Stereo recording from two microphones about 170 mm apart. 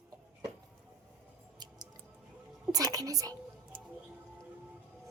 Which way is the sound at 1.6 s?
25° right (ahead or behind).